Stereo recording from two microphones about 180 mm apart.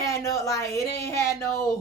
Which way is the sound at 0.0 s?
15° left (ahead or behind).